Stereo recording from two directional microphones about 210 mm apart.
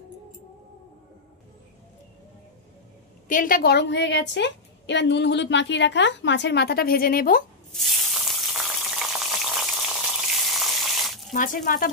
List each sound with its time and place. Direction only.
3.3 s a woman's voice: 40° left (ahead or behind)
7.7 s frying: centre (ahead or behind)
11.3 s speech: 40° left (ahead or behind)